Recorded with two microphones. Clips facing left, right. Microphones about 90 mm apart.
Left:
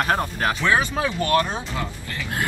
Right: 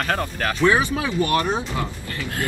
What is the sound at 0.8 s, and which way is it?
Speech, 20° right (ahead or behind).